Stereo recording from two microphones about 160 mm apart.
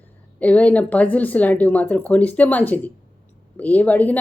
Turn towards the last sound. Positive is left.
turn(degrees=10)  # may be behind; listen again after turning